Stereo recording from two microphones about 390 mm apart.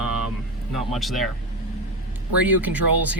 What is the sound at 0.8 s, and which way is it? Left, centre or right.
Speech, centre.